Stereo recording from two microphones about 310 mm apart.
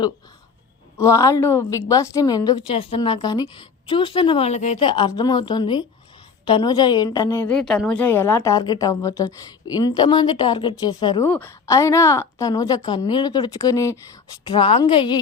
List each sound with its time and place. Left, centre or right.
1.0 s a woman's voice: centre